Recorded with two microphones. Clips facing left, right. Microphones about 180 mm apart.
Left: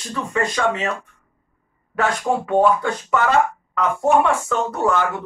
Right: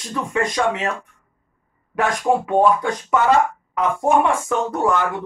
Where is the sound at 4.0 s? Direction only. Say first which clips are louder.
Left 1 dB; 15° right (ahead or behind).